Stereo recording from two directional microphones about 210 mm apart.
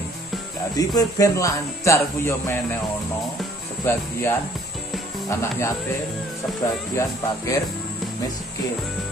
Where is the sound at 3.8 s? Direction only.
10° left (ahead or behind).